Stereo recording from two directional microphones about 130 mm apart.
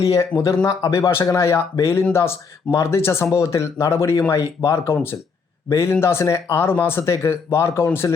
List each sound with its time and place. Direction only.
0.0 s speech: 25° left (ahead or behind)